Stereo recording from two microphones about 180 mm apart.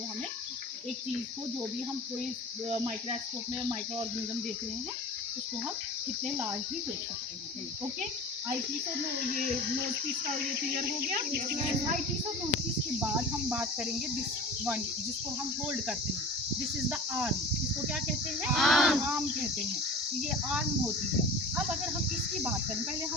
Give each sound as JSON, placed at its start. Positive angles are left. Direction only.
{"t": 11.2, "sound": "speech", "side_deg": -60}
{"t": 15.6, "sound": "speech", "side_deg": -5}
{"t": 18.4, "sound": "speech", "side_deg": 0}
{"t": 20.5, "sound": "speech", "side_deg": -5}